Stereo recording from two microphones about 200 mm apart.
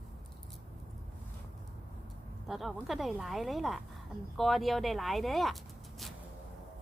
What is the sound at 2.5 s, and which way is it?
Speech, centre (ahead or behind).